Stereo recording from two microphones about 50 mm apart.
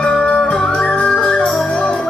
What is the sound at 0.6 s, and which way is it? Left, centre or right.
Music, centre.